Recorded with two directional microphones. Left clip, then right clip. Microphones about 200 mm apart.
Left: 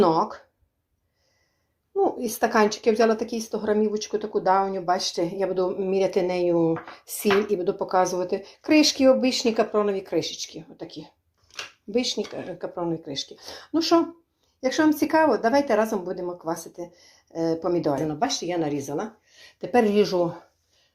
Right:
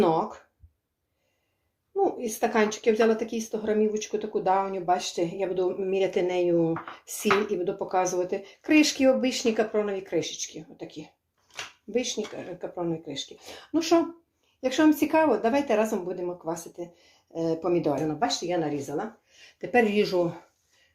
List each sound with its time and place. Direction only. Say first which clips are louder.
0.0 s speech: left 3 dB; 25° left (ahead or behind)
2.0 s speech: left 3 dB; 25° left (ahead or behind)
19.5 s speech: left 3 dB; 20° left (ahead or behind)